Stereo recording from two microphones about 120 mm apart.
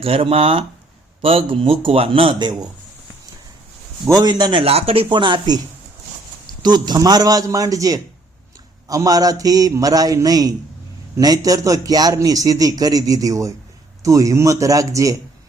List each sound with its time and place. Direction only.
0.0 s a man's voice: 55° right (ahead or behind); by 2.6 s 35° right (ahead or behind)
4.1 s a man's voice: 35° right (ahead or behind)
4.6 s speech: 55° right (ahead or behind)
5.0 s a man's voice: 40° right (ahead or behind)
6.6 s a man's voice: 35° right (ahead or behind)